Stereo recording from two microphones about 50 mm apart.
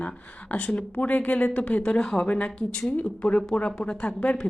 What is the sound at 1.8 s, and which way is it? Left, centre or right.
A woman's voice, centre.